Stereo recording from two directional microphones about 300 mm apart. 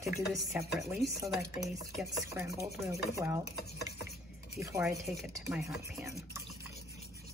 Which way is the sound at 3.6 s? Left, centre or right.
Left.